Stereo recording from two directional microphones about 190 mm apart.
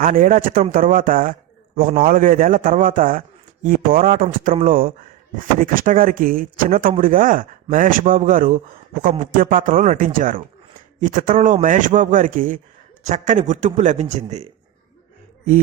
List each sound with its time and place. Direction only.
0.0 s a man's voice: 50° right (ahead or behind)